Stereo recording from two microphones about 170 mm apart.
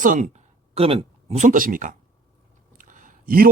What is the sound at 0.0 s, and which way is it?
A man's voice, 45° right (ahead or behind).